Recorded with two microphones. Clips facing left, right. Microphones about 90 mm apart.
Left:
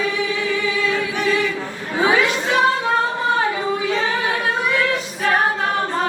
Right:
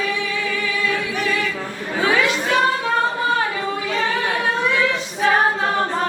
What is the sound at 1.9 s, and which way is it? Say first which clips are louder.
Chatter: left 2 dB; 20° left (ahead or behind).